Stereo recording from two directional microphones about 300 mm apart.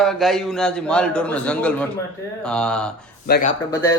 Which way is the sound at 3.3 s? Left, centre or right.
Left.